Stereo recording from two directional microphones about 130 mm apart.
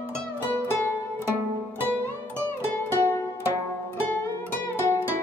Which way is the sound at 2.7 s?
20° left (ahead or behind).